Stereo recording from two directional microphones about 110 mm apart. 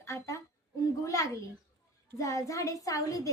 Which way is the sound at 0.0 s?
25° left (ahead or behind).